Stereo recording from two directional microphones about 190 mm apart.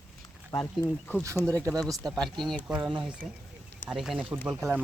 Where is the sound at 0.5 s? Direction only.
10° left (ahead or behind).